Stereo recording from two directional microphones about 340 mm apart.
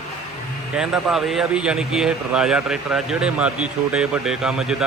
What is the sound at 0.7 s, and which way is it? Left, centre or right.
Speech, centre.